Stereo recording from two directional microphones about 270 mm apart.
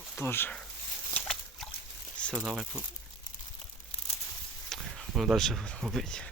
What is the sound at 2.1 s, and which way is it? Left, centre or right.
Speech, centre.